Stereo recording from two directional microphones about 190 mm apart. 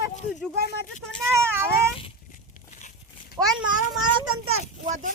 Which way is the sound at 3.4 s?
20° right (ahead or behind).